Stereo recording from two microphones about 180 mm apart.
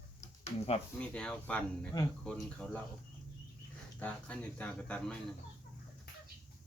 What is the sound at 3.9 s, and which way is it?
Speech, 10° left (ahead or behind).